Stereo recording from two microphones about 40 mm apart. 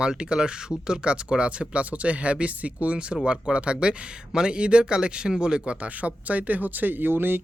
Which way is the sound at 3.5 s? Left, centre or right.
Right.